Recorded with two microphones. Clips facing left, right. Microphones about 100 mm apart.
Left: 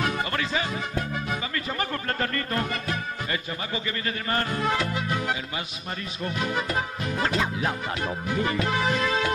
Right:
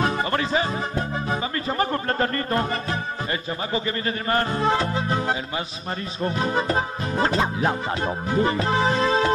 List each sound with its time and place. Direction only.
0.0 s music: 30° right (ahead or behind)